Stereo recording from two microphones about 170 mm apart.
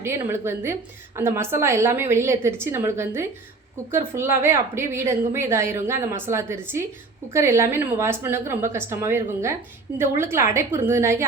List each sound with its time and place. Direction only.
0.0 s a woman's voice: 15° right (ahead or behind)